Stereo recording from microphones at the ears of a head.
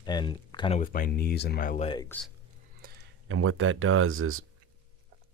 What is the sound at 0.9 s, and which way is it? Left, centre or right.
Speech, left.